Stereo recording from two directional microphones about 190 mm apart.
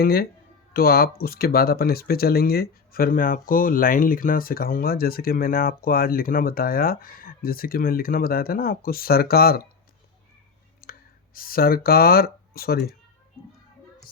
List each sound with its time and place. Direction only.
0.0 s speech: 55° left (ahead or behind)
10.8 s clicking: 55° left (ahead or behind)
11.3 s speech: 50° left (ahead or behind)